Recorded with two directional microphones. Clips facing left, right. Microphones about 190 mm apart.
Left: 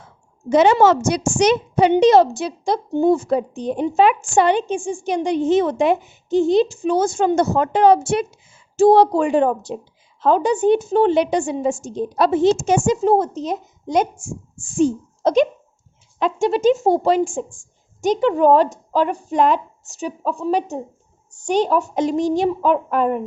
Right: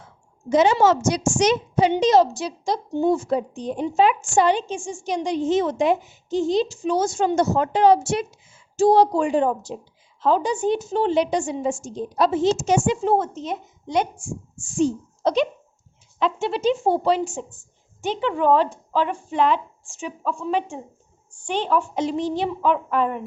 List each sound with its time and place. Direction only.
0.5 s a woman's voice: 65° left (ahead or behind); by 23.2 s 45° left (ahead or behind)